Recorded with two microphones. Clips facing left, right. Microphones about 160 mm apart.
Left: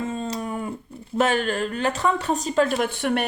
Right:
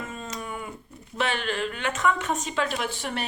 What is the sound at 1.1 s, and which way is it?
A woman's voice, 45° left (ahead or behind).